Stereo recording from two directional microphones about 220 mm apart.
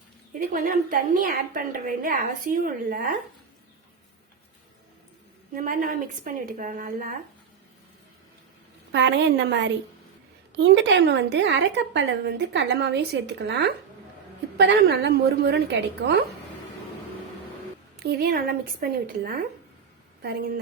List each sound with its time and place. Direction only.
0.3 s a woman's voice: 40° right (ahead or behind)
5.5 s a woman's voice: 40° right (ahead or behind)
8.9 s a woman's voice: 50° right (ahead or behind)
18.0 s a woman's voice: 45° right (ahead or behind)